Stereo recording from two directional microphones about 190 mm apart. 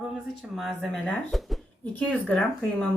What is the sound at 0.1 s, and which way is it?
Speech, centre (ahead or behind).